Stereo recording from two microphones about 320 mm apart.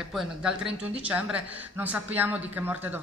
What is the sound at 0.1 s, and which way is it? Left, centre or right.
A woman's voice, centre.